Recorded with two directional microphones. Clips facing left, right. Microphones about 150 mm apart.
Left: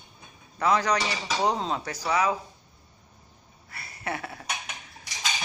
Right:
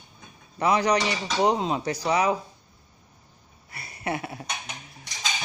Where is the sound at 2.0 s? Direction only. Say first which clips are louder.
Right 2 dB; 20° right (ahead or behind).